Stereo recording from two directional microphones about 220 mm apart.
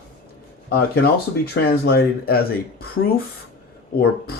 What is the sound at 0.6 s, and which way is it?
Speech, 45° left (ahead or behind).